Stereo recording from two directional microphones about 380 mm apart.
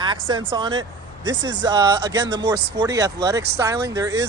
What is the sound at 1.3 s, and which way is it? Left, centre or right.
Speech, right.